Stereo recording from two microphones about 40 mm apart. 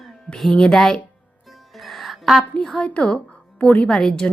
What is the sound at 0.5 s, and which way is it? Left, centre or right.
Speech, centre.